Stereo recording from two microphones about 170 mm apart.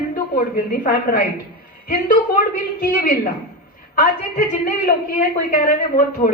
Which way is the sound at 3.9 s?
55° left (ahead or behind).